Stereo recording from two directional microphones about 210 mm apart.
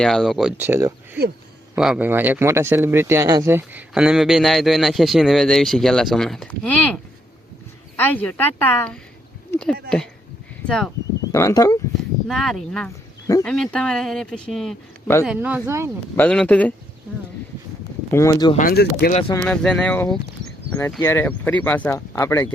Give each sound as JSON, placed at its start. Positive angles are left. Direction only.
{"t": 0.0, "sound": "speech", "side_deg": 0}
{"t": 10.7, "sound": "speech", "side_deg": 0}
{"t": 11.3, "sound": "speech", "side_deg": 15}
{"t": 12.3, "sound": "speech", "side_deg": 0}
{"t": 15.0, "sound": "speech", "side_deg": 15}
{"t": 15.3, "sound": "speech", "side_deg": -5}
{"t": 16.1, "sound": "speech", "side_deg": 5}
{"t": 17.1, "sound": "a sound", "side_deg": -5}
{"t": 18.1, "sound": "speech", "side_deg": 15}
{"t": 18.5, "sound": "speech", "side_deg": 45}
{"t": 19.5, "sound": "speech", "side_deg": 5}